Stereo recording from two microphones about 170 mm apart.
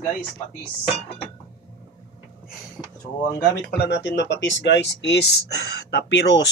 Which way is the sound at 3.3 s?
70° left (ahead or behind).